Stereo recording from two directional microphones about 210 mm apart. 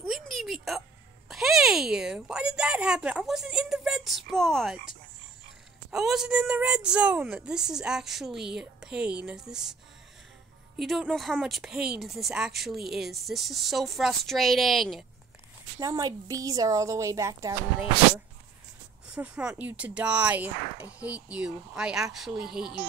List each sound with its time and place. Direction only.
0.0 s a sound: centre (ahead or behind)
1.3 s speech: centre (ahead or behind)
5.9 s speech: centre (ahead or behind)
10.8 s speech: centre (ahead or behind)
15.8 s speech: 15° right (ahead or behind)